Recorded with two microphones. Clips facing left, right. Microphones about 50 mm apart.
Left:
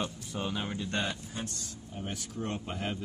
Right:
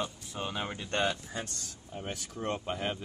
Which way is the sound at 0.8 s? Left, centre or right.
Right.